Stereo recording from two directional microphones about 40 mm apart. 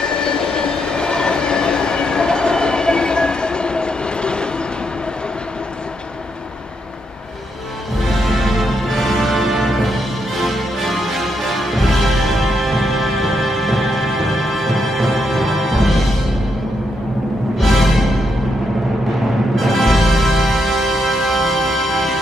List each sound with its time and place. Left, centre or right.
0.0 s train: centre
8.1 s music: centre
17.6 s music: centre
19.5 s music: centre